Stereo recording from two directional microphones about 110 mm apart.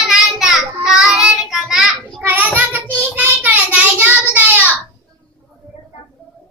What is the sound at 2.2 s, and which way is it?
Child singing, 15° right (ahead or behind).